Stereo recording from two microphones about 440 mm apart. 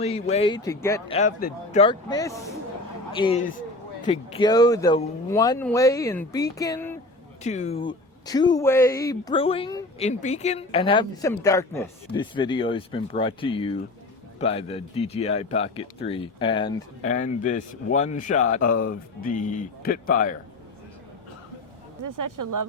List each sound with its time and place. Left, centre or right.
0.0 s speech: centre
7.4 s speech: centre
22.0 s speech: right